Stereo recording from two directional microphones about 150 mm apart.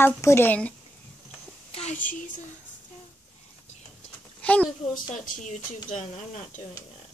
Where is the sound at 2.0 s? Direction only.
60° left (ahead or behind).